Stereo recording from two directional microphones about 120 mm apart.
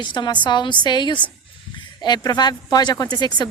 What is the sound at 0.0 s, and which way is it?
Speech, 40° left (ahead or behind).